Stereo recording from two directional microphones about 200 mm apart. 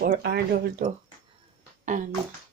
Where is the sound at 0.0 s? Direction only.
55° right (ahead or behind).